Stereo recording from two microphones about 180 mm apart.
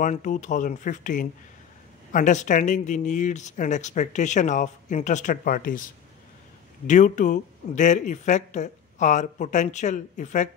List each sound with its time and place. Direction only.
0.0 s speech: 45° left (ahead or behind)
6.9 s speech: 45° left (ahead or behind)